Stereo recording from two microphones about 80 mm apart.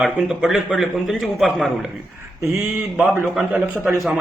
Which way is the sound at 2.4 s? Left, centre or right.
Right.